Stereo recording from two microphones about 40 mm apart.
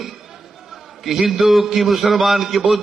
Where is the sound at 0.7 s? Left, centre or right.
Centre.